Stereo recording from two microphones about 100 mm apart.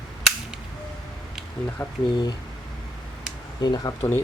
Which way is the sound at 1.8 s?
20° left (ahead or behind).